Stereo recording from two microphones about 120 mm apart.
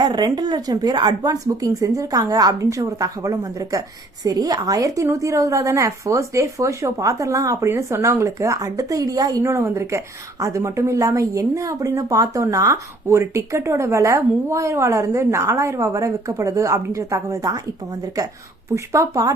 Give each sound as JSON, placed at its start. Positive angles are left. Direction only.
{"t": 0.0, "sound": "speech", "side_deg": -35}
{"t": 18.7, "sound": "speech", "side_deg": -25}